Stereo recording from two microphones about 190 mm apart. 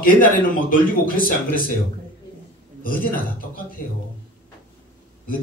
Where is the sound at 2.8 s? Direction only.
45° left (ahead or behind).